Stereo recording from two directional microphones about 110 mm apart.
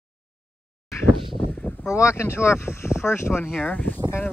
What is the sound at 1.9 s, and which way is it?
Speech, 25° left (ahead or behind).